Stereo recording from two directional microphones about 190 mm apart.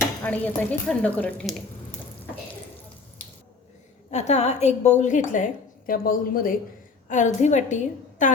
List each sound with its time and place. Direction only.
0.3 s a woman's voice: 5° left (ahead or behind)
4.1 s a woman's voice: 35° left (ahead or behind)